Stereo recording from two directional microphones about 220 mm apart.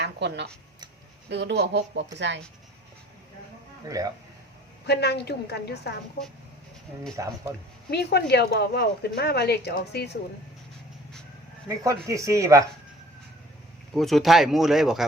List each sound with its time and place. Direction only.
0.0 s speech: 50° right (ahead or behind)
3.8 s speech: 15° right (ahead or behind)
4.9 s speech: 50° left (ahead or behind)
7.2 s speech: 15° right (ahead or behind)
7.9 s speech: 50° left (ahead or behind)
11.7 s speech: 15° right (ahead or behind)
13.9 s speech: centre (ahead or behind)